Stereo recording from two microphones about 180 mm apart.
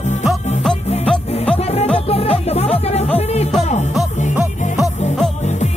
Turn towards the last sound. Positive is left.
turn(degrees=0)  # may be behind; listen again after turning